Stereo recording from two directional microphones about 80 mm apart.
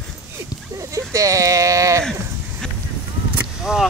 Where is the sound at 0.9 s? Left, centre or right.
Right.